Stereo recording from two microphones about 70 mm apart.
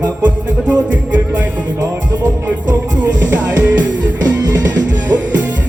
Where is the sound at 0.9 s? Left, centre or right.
Right.